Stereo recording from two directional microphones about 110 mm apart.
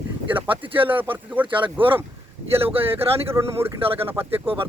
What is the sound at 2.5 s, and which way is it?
Speech, 60° right (ahead or behind).